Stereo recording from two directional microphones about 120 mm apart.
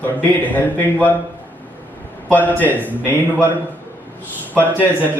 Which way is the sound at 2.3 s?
15° left (ahead or behind).